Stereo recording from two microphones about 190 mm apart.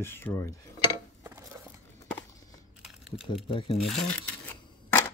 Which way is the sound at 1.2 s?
15° right (ahead or behind).